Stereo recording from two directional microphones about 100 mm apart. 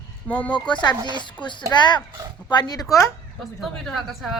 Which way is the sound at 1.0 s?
50° right (ahead or behind).